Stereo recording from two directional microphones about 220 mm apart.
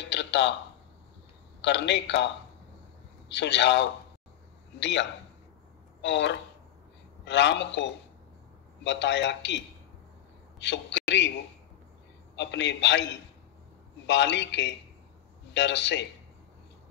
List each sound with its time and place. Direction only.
0.1 s a sound: 55° left (ahead or behind)
1.6 s a man's voice: 55° left (ahead or behind)
3.3 s a man's voice: 50° left (ahead or behind)
10.6 s a man's voice: 55° left (ahead or behind)
12.4 s a man's voice: 55° left (ahead or behind)